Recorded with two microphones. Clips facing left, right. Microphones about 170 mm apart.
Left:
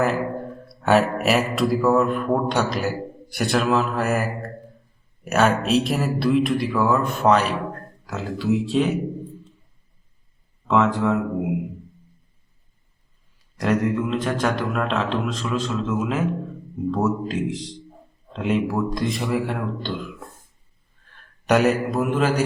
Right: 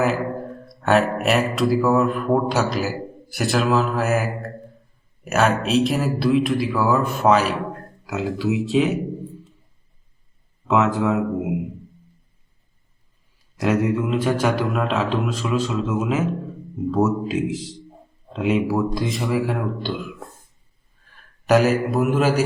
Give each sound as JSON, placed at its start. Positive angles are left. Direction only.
{"t": 0.0, "sound": "a man's voice", "side_deg": 0}
{"t": 10.7, "sound": "a man's voice", "side_deg": -5}
{"t": 13.6, "sound": "a man's voice", "side_deg": -5}
{"t": 21.1, "sound": "a man's voice", "side_deg": 0}